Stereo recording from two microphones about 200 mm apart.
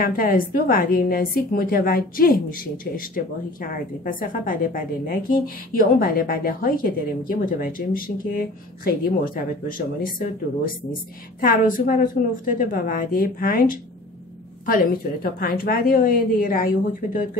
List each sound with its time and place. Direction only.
0.0 s a woman's voice: 45° left (ahead or behind)